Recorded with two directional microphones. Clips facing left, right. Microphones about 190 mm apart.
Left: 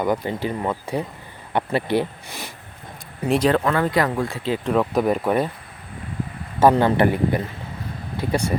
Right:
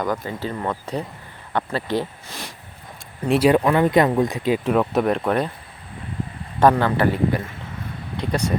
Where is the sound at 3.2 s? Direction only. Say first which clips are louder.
Right 2 dB; centre (ahead or behind).